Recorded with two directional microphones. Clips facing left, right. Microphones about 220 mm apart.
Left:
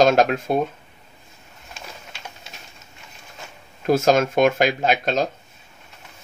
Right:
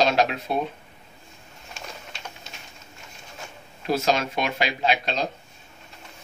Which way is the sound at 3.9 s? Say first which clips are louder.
Left 6 dB; 50° left (ahead or behind).